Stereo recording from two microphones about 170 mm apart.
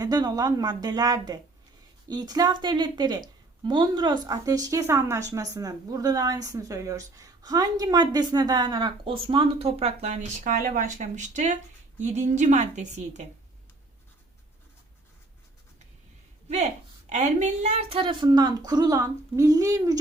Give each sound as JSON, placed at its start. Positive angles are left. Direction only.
{"t": 0.0, "sound": "a woman's voice", "side_deg": -25}
{"t": 17.1, "sound": "speech", "side_deg": -40}